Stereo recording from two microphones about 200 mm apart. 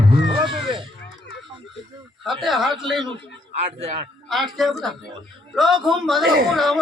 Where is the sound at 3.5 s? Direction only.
30° right (ahead or behind).